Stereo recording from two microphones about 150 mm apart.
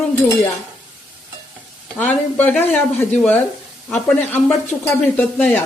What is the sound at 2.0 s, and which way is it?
A woman's voice, 10° left (ahead or behind).